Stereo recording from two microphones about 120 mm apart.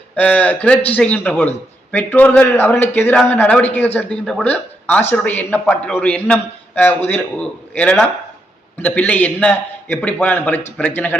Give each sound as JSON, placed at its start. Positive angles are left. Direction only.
{"t": 0.2, "sound": "speech", "side_deg": 15}
{"t": 8.8, "sound": "speech", "side_deg": 10}